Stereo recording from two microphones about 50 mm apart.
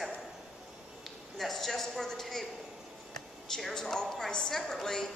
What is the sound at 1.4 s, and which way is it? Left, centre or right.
A woman's voice, centre.